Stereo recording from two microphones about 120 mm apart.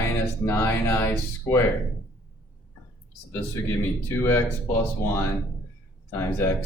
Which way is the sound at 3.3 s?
20° left (ahead or behind).